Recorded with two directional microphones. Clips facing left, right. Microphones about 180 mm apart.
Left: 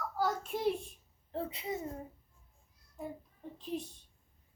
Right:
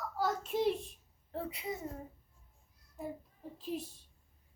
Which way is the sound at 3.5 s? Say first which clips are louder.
Even; 5° right (ahead or behind).